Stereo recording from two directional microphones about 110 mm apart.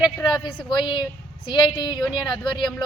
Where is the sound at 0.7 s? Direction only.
45° left (ahead or behind).